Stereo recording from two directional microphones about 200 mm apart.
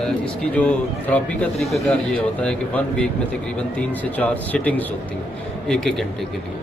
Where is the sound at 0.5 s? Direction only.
10° left (ahead or behind).